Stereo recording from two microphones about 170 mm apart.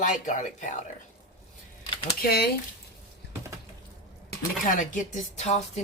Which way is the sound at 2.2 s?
65° left (ahead or behind).